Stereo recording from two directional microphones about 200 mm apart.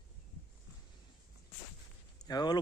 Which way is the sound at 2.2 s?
20° left (ahead or behind).